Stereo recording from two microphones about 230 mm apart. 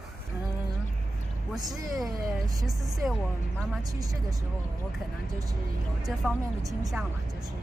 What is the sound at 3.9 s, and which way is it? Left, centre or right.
Speech, centre.